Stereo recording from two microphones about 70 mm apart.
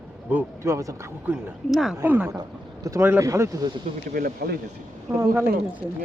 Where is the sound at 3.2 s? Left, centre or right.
Right.